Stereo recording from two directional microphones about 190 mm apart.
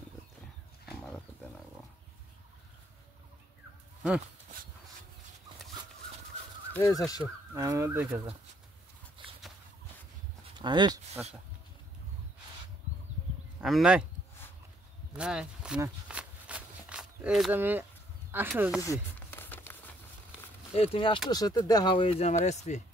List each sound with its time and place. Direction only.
0.8 s wild animals: centre (ahead or behind)
6.7 s speech: 15° left (ahead or behind)
7.5 s speech: 15° right (ahead or behind)
10.6 s speech: 25° right (ahead or behind)
11.2 s speech: 10° right (ahead or behind)
13.6 s speech: centre (ahead or behind)
15.1 s speech: 5° right (ahead or behind)
15.8 s a sound: 5° right (ahead or behind)
18.3 s speech: 10° right (ahead or behind)
18.8 s crumpling: 15° left (ahead or behind)
20.7 s speech: 30° left (ahead or behind)